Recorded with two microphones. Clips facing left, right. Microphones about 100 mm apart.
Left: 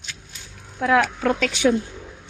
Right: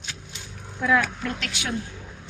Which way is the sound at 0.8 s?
60° left (ahead or behind).